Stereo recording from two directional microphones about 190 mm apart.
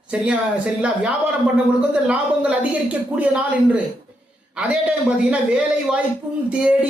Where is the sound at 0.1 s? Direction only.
5° right (ahead or behind).